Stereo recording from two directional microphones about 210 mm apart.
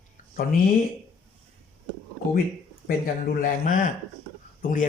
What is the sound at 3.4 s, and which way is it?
Speech, 40° left (ahead or behind).